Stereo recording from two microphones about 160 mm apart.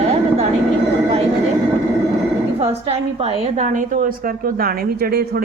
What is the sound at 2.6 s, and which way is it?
A woman's voice, 35° right (ahead or behind).